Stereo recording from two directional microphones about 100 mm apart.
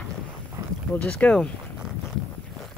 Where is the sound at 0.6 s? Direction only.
35° right (ahead or behind).